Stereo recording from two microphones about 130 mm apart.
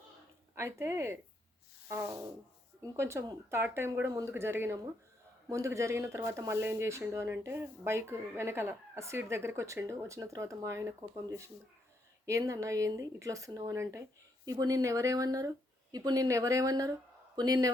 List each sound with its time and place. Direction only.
0.5 s speech: 20° right (ahead or behind)
1.9 s a sound: 15° right (ahead or behind)
2.8 s speech: 20° right (ahead or behind)